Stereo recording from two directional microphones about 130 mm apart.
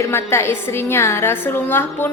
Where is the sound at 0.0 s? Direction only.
20° left (ahead or behind).